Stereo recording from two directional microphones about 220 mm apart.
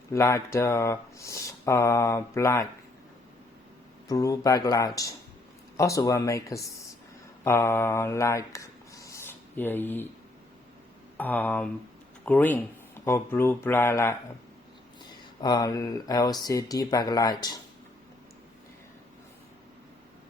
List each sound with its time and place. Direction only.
0.1 s speech: 15° left (ahead or behind)
4.1 s speech: 15° left (ahead or behind)
11.2 s speech: 10° left (ahead or behind)